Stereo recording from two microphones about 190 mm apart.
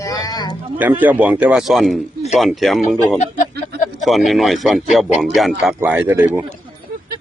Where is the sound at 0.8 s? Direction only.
10° right (ahead or behind).